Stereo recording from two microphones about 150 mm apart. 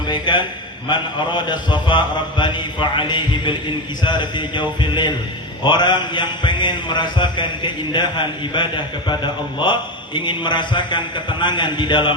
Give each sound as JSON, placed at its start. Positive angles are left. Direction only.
{"t": 0.1, "sound": "a man's voice", "side_deg": 30}
{"t": 0.9, "sound": "mantra", "side_deg": 30}